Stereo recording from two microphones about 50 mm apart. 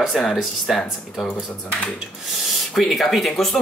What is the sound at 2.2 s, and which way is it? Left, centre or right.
Speech, centre.